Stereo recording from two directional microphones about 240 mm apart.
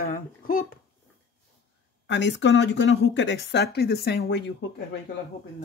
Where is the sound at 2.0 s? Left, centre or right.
Left.